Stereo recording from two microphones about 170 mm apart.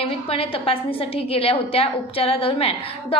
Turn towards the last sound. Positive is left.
turn(degrees=35)  # may be behind; listen again after turning